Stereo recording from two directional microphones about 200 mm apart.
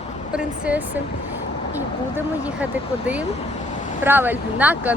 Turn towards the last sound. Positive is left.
turn(degrees=-10)  # may be behind; listen again after turning